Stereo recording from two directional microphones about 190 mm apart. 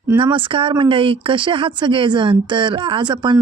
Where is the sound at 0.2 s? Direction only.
25° right (ahead or behind).